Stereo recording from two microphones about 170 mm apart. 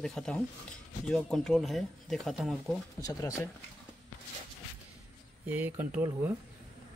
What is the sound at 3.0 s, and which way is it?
Speech, 20° left (ahead or behind).